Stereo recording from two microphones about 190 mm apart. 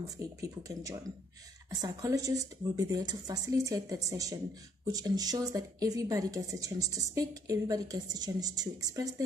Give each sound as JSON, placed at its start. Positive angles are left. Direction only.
{"t": 0.4, "sound": "a woman's voice", "side_deg": -15}